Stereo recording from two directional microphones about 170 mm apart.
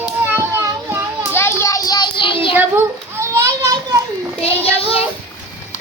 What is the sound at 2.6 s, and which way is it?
Children playing, 15° right (ahead or behind).